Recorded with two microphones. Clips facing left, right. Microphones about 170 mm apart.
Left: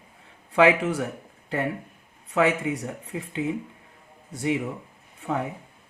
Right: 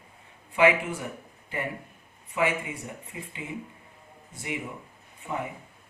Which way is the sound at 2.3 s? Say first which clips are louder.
Left 5 dB; 85° left.